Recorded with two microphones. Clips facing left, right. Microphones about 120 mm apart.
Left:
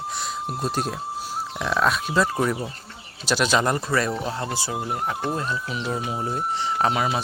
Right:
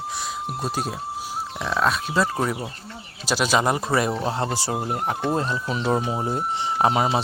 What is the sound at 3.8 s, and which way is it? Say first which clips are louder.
Speech: right 2 dB; 20° right (ahead or behind).